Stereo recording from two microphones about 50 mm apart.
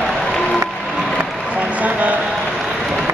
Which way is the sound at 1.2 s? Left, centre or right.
Right.